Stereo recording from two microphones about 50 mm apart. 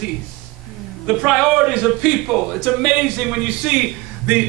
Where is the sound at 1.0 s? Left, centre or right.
Centre.